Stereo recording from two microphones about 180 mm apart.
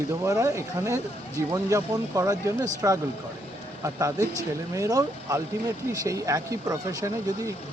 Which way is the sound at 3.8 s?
15° right (ahead or behind).